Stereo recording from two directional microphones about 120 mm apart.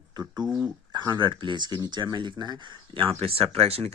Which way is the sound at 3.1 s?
55° right (ahead or behind).